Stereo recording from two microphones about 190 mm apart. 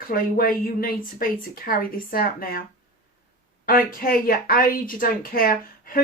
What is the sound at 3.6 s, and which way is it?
Speech, 50° left (ahead or behind).